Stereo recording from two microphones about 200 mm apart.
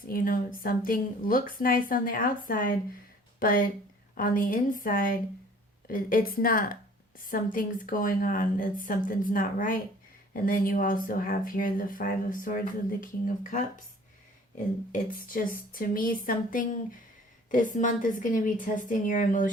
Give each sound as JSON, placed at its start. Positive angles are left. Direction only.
{"t": 0.1, "sound": "speech", "side_deg": 45}
{"t": 14.9, "sound": "a woman's voice", "side_deg": 45}